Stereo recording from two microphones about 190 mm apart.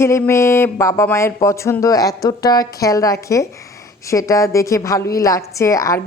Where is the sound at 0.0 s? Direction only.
15° left (ahead or behind).